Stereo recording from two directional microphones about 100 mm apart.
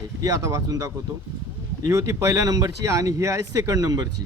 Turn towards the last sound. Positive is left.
turn(degrees=-40)  # may be behind; listen again after turning